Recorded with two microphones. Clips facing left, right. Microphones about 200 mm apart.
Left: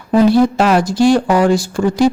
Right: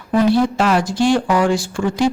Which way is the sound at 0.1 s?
35° left (ahead or behind).